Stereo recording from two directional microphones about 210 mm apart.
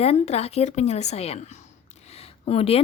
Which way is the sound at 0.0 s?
30° left (ahead or behind).